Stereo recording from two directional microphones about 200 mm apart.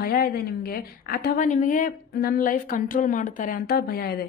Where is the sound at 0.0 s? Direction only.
50° left (ahead or behind).